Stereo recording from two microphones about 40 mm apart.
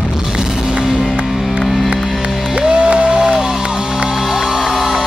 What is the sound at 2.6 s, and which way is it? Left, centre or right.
Music, right.